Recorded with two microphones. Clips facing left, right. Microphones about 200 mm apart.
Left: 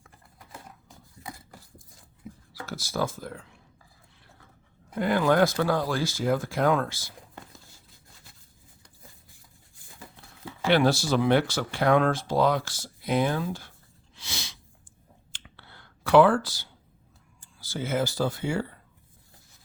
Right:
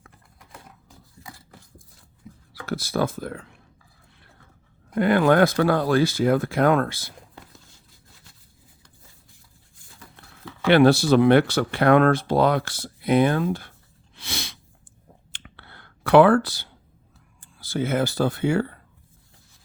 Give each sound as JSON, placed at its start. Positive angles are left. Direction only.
{"t": 2.5, "sound": "speech", "side_deg": -60}
{"t": 4.9, "sound": "speech", "side_deg": -65}
{"t": 10.0, "sound": "a sound", "side_deg": 25}
{"t": 10.7, "sound": "speech", "side_deg": -60}
{"t": 14.2, "sound": "sneeze", "side_deg": -60}
{"t": 15.3, "sound": "computer keyboard", "side_deg": -60}
{"t": 17.4, "sound": "speech", "side_deg": -60}